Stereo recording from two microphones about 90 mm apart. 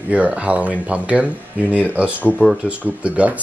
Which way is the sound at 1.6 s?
20° left (ahead or behind).